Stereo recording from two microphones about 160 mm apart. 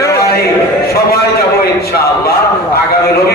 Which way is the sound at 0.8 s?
75° left (ahead or behind).